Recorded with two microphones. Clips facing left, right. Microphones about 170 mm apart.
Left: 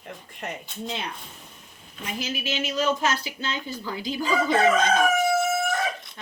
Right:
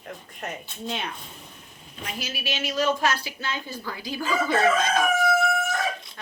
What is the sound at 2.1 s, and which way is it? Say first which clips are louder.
A woman's voice: left 3 dB; 20° left (ahead or behind).